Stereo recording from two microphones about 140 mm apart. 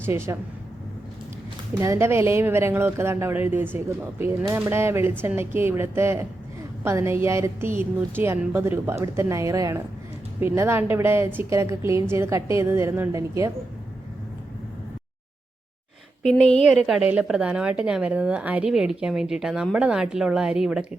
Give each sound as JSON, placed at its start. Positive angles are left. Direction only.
{"t": 0.0, "sound": "speech", "side_deg": -20}
{"t": 1.8, "sound": "a woman's voice", "side_deg": -20}
{"t": 16.2, "sound": "a woman's voice", "side_deg": 5}